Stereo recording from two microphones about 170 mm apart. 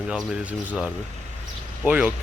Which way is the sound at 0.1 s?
5° right (ahead or behind).